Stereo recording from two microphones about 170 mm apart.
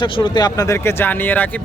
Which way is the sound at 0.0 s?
25° left (ahead or behind).